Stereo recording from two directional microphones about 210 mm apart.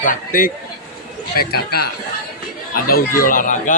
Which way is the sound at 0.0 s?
40° left (ahead or behind).